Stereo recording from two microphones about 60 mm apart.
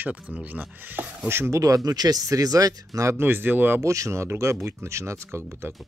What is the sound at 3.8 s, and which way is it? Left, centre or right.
Speech, right.